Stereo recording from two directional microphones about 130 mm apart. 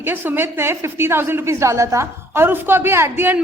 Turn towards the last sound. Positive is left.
turn(degrees=-15)  # may be behind; listen again after turning